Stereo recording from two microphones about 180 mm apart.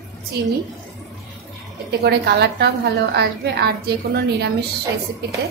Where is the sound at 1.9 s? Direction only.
65° right (ahead or behind).